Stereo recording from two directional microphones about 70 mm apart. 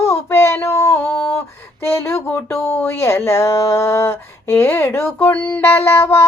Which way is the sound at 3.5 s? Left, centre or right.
Left.